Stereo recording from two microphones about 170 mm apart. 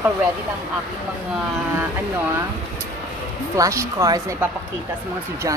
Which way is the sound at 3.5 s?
20° right (ahead or behind).